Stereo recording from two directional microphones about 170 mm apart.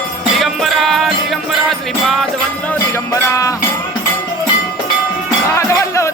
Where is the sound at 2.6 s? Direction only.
15° left (ahead or behind).